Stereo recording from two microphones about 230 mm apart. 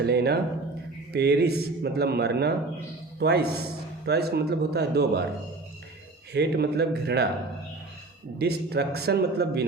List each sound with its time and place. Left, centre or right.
0.0 s a man's voice: right
6.3 s a man's voice: right
8.4 s a man's voice: right